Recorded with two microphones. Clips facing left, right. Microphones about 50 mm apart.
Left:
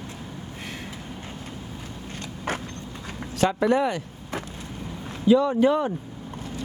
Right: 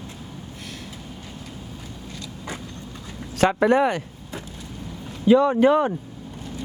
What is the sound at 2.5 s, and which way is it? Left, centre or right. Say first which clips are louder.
Vehicle: left 6 dB; left.